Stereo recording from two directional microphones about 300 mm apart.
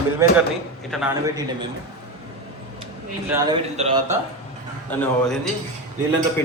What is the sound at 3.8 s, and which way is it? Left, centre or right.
Speech, right.